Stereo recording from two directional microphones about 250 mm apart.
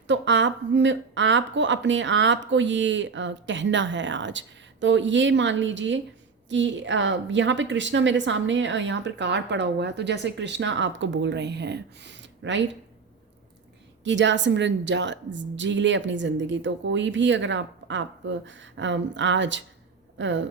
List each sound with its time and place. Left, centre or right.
0.1 s a woman's voice: right
14.0 s a woman's voice: right